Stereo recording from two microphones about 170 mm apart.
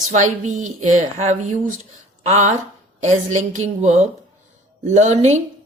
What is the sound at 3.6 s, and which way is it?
A woman's voice, 40° right (ahead or behind).